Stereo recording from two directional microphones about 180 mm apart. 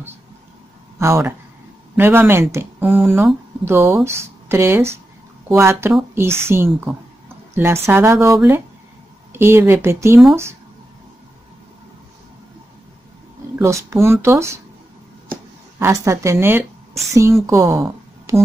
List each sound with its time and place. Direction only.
0.9 s speech: 15° right (ahead or behind)
13.6 s speech: 15° right (ahead or behind)
15.8 s speech: 15° right (ahead or behind)